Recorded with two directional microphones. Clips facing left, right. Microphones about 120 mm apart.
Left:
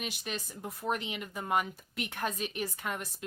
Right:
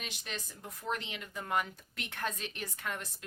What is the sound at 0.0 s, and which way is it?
A woman's voice, 10° left (ahead or behind).